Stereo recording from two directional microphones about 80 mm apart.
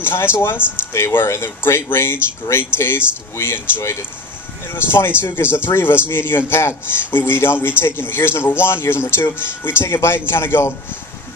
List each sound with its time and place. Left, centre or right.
0.0 s a man's voice: left
3.3 s a man's voice: left